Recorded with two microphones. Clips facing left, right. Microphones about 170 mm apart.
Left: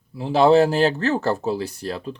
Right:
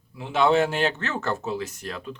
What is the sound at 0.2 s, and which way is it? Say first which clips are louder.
Speech: left 6 dB; 35° left (ahead or behind).